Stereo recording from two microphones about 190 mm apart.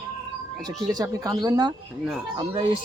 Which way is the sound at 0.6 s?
20° right (ahead or behind).